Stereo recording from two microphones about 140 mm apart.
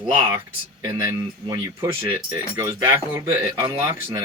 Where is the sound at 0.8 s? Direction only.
20° right (ahead or behind).